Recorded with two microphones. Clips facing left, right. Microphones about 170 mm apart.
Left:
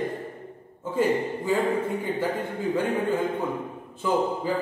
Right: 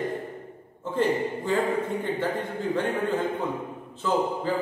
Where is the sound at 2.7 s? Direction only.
10° left (ahead or behind).